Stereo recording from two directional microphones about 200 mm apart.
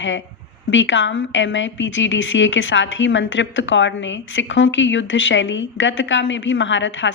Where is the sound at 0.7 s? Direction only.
70° left (ahead or behind).